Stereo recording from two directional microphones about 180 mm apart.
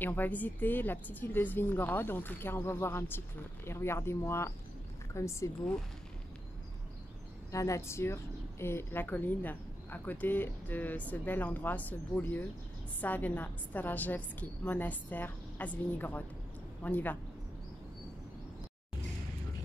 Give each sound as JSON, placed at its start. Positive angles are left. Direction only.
{"t": 0.0, "sound": "speech", "side_deg": 10}
{"t": 7.5, "sound": "speech", "side_deg": 15}